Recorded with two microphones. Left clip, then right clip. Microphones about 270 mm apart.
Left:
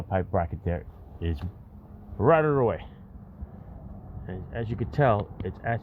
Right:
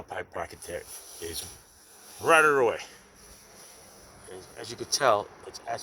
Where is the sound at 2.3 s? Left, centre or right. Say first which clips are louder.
Right 1 dB; centre.